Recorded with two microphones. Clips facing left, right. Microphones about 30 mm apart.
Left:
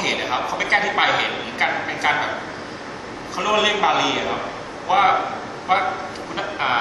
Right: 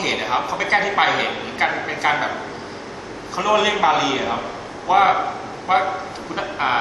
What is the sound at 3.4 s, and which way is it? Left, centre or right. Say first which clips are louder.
A man's voice: right 1 dB; centre.